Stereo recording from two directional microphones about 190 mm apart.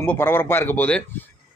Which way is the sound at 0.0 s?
10° left (ahead or behind).